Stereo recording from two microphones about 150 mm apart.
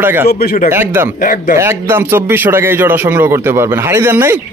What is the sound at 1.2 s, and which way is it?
Speech, 70° left (ahead or behind).